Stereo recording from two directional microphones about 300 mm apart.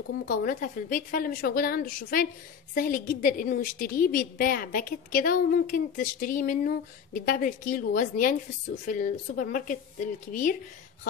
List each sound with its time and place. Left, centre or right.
0.3 s a woman's voice: left